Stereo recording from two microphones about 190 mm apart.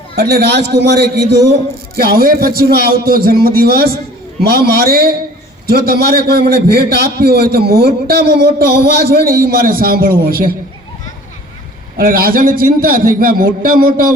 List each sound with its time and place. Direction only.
0.2 s a man's voice: 55° right (ahead or behind)
2.0 s a man's voice: 50° right (ahead or behind)
11.9 s a man's voice: 50° right (ahead or behind)